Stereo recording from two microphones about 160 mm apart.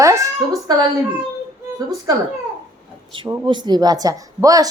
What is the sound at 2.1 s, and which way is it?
A woman's voice, 25° right (ahead or behind).